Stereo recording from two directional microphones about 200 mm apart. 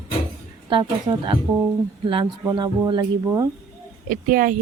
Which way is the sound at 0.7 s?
25° right (ahead or behind).